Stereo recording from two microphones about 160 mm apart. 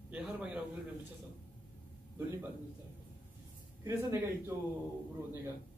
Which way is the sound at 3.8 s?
15° right (ahead or behind).